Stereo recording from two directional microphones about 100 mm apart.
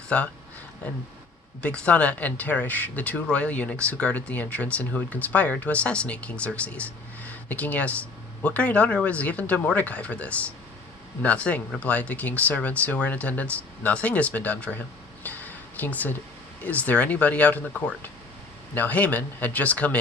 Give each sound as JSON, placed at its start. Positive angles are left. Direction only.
{"t": 0.1, "sound": "speech", "side_deg": 15}
{"t": 1.6, "sound": "speech", "side_deg": 10}
{"t": 15.2, "sound": "a sound", "side_deg": 15}
{"t": 16.6, "sound": "speech", "side_deg": 15}